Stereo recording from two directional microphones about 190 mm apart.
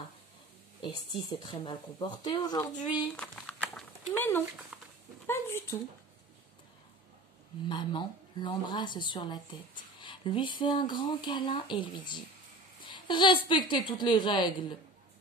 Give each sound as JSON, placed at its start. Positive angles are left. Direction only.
{"t": 0.8, "sound": "speech", "side_deg": 25}
{"t": 3.2, "sound": "a sound", "side_deg": 5}
{"t": 7.6, "sound": "speech", "side_deg": 25}